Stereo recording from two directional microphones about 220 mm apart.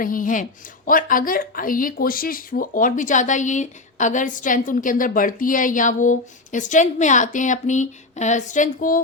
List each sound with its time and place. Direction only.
0.0 s speech: 40° left (ahead or behind)